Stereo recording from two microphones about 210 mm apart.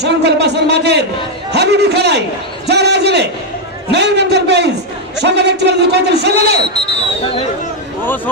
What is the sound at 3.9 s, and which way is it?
A man's voice, 55° right (ahead or behind).